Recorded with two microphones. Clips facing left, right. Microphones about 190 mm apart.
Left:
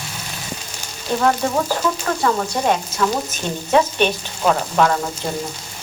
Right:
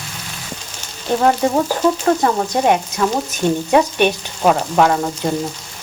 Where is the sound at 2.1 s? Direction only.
30° right (ahead or behind).